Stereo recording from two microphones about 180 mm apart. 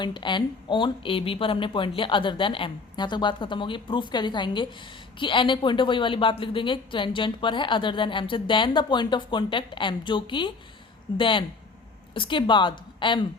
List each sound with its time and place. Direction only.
0.0 s a woman's voice: 25° left (ahead or behind)